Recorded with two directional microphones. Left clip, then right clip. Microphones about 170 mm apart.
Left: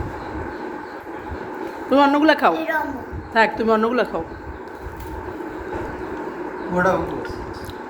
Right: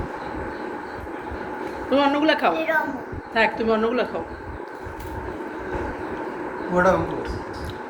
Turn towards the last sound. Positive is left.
turn(degrees=0)  # may be behind; listen again after turning